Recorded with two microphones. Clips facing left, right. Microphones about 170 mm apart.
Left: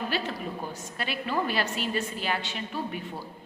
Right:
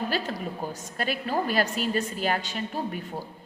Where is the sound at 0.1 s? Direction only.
40° right (ahead or behind).